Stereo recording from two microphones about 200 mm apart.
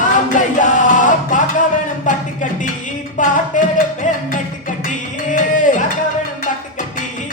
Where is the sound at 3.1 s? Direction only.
40° left (ahead or behind).